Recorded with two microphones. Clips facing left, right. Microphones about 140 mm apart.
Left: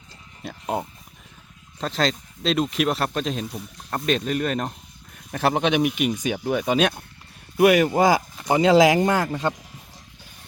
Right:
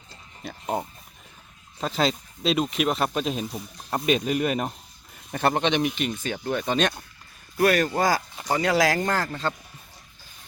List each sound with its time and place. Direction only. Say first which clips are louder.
0.4 s speech: left 1 dB; 5° left (ahead or behind)